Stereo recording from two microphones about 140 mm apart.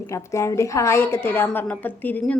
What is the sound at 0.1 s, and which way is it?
A woman's voice, 20° left (ahead or behind).